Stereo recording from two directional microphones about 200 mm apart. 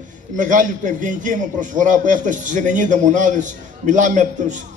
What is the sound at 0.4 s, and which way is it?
A man's voice, 40° right (ahead or behind).